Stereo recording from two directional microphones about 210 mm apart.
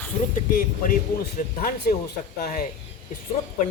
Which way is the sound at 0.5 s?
40° left (ahead or behind).